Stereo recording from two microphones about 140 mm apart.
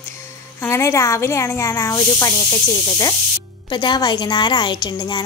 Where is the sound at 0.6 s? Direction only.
20° left (ahead or behind).